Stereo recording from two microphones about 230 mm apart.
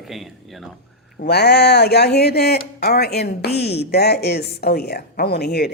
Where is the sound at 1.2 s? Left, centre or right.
Left.